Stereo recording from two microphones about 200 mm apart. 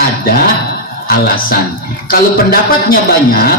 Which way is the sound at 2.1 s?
45° left (ahead or behind).